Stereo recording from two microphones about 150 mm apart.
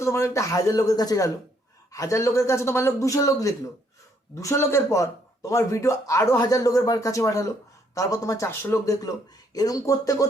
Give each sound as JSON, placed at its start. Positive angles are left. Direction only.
{"t": 0.0, "sound": "a man's voice", "side_deg": 20}